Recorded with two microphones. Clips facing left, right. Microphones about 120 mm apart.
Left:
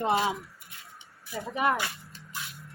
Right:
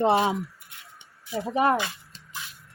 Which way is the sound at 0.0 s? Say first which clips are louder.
Right 5 dB; 30° right (ahead or behind).